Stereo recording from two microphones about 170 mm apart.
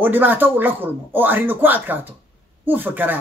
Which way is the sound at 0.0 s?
10° right (ahead or behind).